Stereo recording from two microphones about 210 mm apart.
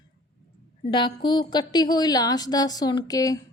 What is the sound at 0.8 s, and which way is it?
A woman's voice, 20° left (ahead or behind).